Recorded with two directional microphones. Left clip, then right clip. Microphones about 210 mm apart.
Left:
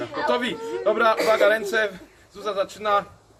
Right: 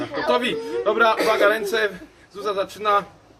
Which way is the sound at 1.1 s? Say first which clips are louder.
Even; 10° left (ahead or behind).